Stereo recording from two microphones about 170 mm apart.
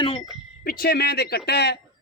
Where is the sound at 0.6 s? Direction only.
60° left (ahead or behind).